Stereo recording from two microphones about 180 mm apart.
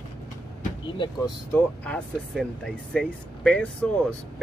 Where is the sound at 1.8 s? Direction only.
5° left (ahead or behind).